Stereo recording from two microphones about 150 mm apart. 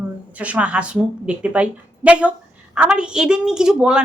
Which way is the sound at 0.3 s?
10° right (ahead or behind).